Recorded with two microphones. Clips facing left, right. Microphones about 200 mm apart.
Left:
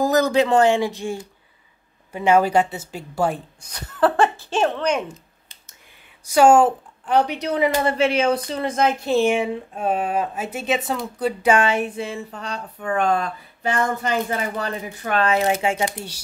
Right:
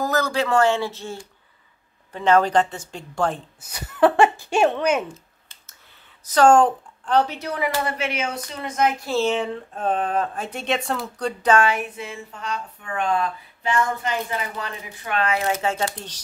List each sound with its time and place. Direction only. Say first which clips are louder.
0.0 s speech: left 5 dB; 15° left (ahead or behind)
3.6 s speech: right 2 dB; 10° right (ahead or behind)
5.0 s a sound: left 1 dB; 15° left (ahead or behind)
6.2 s a woman's voice: left 1 dB; 10° left (ahead or behind); by 9.1 s 30° left (ahead or behind)
9.1 s speech: left 3 dB; 10° left (ahead or behind)
11.5 s a woman's voice: left 1 dB; 25° left (ahead or behind)
15.6 s speech: left 2 dB; 15° left (ahead or behind)